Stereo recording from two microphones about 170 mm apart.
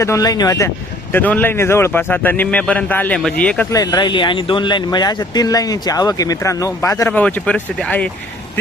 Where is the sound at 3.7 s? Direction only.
25° left (ahead or behind).